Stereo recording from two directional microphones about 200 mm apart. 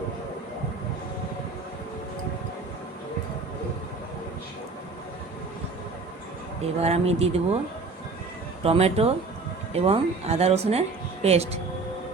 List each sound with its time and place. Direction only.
6.8 s speech: 30° right (ahead or behind)
8.6 s speech: 30° right (ahead or behind)